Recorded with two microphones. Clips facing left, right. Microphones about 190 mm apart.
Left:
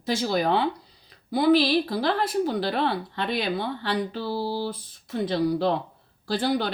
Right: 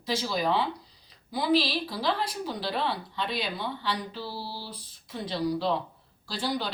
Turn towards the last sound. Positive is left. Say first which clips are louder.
# left 6 dB
turn(degrees=55)  # may be behind; listen again after turning